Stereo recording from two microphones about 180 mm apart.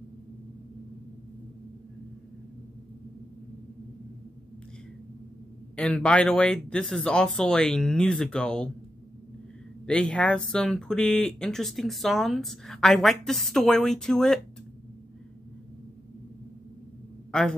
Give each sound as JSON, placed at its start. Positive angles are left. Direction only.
{"t": 5.8, "sound": "speech", "side_deg": 5}
{"t": 9.8, "sound": "speech", "side_deg": 5}
{"t": 17.3, "sound": "a man's voice", "side_deg": 5}